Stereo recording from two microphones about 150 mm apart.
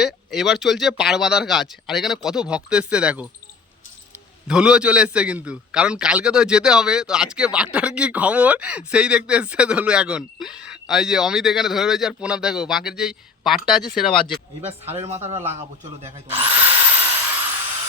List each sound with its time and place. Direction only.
0.0 s a man's voice: centre (ahead or behind)
4.4 s a man's voice: 5° right (ahead or behind)
14.8 s speech: 45° right (ahead or behind)